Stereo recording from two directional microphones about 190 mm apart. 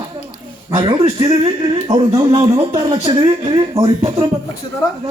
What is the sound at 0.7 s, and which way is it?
Speech, 25° right (ahead or behind).